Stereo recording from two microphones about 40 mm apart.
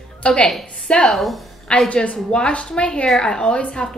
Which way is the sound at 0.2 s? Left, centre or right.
Left.